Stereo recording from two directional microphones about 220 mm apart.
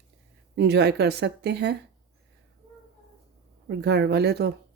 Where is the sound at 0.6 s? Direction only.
50° right (ahead or behind).